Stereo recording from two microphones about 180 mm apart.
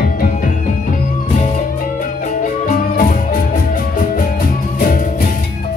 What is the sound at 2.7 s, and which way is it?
Music, 45° left (ahead or behind).